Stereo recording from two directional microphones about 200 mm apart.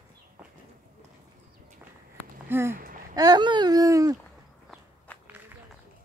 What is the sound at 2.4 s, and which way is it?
Speech, 10° right (ahead or behind).